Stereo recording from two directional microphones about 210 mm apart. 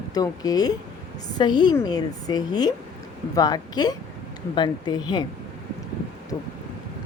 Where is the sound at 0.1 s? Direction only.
20° left (ahead or behind).